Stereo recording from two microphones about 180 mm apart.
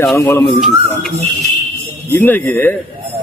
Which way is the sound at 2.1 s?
10° left (ahead or behind).